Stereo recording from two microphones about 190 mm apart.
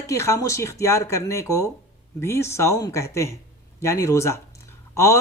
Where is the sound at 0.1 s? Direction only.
15° left (ahead or behind).